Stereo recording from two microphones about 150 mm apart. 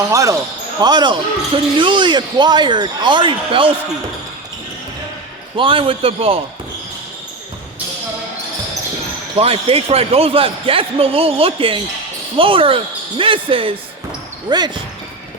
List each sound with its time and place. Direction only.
0.1 s speech: 20° right (ahead or behind)
5.5 s speech: 35° right (ahead or behind)
9.3 s speech: 40° right (ahead or behind)